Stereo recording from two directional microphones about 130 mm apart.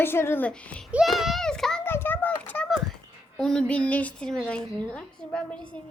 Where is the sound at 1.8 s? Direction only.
15° left (ahead or behind).